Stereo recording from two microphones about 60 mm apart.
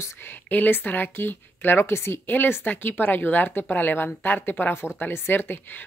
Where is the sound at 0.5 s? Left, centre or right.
Left.